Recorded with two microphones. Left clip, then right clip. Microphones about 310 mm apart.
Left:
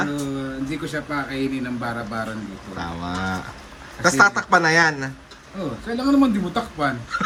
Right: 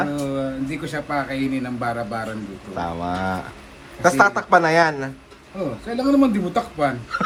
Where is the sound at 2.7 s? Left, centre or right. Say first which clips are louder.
Right 4 dB; centre.